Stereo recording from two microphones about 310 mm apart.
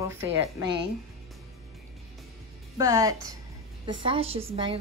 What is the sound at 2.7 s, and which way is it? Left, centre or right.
A woman's voice, centre.